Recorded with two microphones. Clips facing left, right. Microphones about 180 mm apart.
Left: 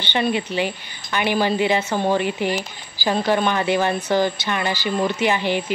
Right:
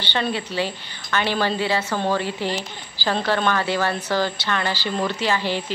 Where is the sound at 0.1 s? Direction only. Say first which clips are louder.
Left 4 dB; 15° left (ahead or behind).